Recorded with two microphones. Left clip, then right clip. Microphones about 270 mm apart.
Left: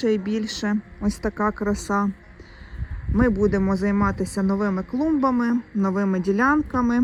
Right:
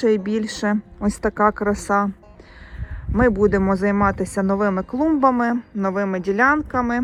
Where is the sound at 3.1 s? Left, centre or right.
Centre.